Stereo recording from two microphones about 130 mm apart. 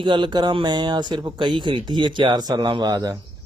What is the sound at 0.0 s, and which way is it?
Speech, 40° right (ahead or behind).